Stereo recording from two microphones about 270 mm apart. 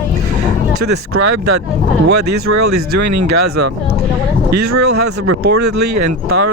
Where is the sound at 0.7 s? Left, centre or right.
Right.